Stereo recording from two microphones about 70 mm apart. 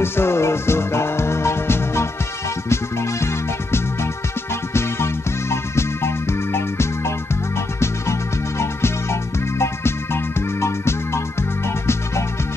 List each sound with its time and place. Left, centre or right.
0.0 s music: left
4.7 s music: left